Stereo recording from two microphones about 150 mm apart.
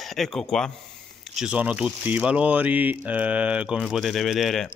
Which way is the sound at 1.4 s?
10° right (ahead or behind).